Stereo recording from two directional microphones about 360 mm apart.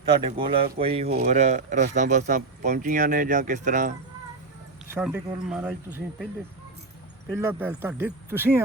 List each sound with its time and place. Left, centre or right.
0.1 s speech: centre
4.9 s speech: centre
7.3 s speech: centre